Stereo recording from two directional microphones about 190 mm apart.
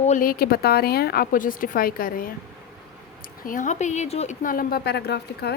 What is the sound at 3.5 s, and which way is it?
A woman's voice, 40° left (ahead or behind).